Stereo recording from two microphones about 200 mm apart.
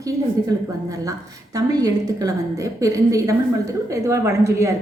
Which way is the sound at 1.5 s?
20° right (ahead or behind).